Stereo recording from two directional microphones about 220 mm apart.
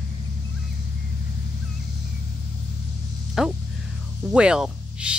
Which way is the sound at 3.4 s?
Centre (ahead or behind).